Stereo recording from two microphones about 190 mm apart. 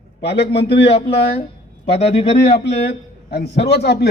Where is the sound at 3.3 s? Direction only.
60° left (ahead or behind).